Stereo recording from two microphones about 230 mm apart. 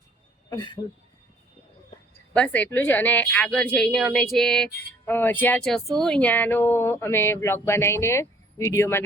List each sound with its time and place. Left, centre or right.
0.5 s speech: centre
2.3 s a woman's voice: centre